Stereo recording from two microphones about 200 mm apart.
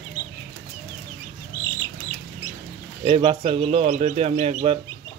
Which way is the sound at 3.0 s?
30° right (ahead or behind).